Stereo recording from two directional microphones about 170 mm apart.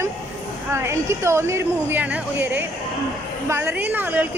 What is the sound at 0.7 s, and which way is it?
A woman's voice, 15° right (ahead or behind).